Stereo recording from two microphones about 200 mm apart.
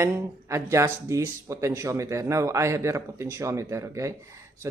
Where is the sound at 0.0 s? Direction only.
15° right (ahead or behind).